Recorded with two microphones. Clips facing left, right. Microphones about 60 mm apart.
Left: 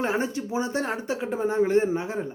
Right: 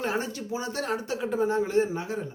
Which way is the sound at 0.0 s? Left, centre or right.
Left.